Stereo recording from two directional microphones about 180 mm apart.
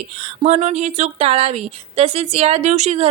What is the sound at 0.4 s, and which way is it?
A woman's voice, 35° right (ahead or behind).